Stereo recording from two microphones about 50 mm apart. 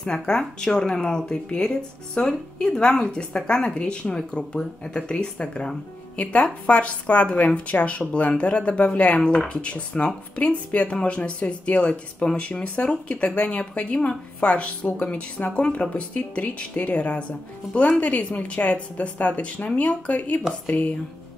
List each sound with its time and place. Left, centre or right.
0.3 s speech: centre
6.1 s speech: left